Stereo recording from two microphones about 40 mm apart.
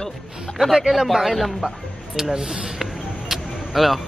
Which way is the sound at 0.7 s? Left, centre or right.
Centre.